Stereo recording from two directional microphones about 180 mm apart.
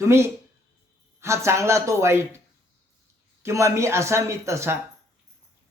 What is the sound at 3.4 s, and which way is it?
Speech, 15° right (ahead or behind).